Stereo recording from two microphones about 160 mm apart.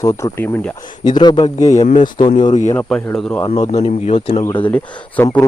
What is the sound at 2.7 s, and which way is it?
Speech, 10° left (ahead or behind).